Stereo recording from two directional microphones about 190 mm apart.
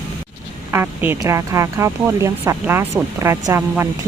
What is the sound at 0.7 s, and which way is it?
Speech, 10° right (ahead or behind).